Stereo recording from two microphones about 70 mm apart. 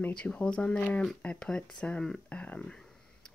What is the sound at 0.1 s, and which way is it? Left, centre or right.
Speech, centre.